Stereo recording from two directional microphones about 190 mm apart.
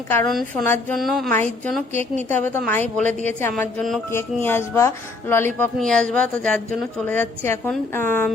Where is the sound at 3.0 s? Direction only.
40° right (ahead or behind).